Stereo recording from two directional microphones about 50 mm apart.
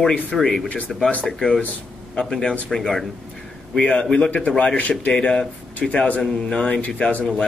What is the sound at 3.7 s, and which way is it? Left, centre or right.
A man's voice, left.